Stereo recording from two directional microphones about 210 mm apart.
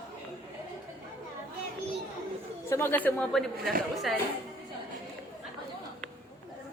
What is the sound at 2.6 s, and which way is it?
Speech, 10° left (ahead or behind).